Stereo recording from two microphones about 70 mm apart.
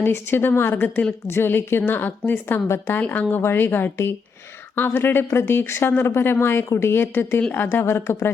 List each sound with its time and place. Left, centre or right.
0.0 s speech: left